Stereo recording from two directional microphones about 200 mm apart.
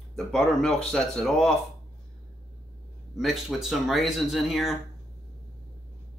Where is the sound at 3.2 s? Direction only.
Centre (ahead or behind).